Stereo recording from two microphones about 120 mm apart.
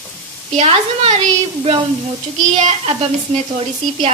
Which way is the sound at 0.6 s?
60° right (ahead or behind).